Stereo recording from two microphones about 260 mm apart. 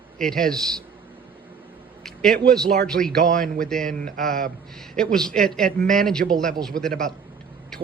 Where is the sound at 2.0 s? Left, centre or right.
Centre.